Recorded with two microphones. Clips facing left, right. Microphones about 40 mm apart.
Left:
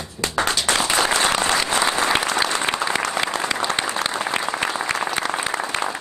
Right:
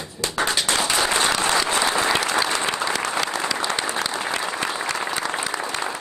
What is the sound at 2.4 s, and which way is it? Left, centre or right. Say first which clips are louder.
Applause: left 1 dB; left.